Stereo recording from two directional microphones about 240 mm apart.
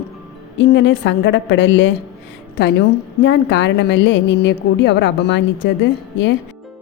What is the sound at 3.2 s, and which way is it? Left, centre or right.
A woman's voice, left.